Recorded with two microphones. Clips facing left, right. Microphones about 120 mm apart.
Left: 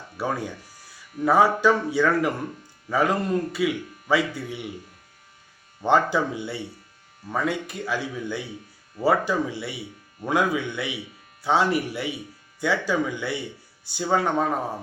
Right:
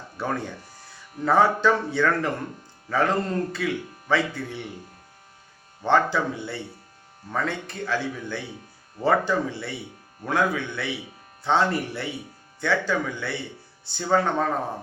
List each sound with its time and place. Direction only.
0.2 s speech: 10° left (ahead or behind)
5.8 s speech: 15° left (ahead or behind)